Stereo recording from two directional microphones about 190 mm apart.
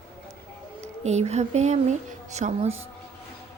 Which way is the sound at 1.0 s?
35° right (ahead or behind).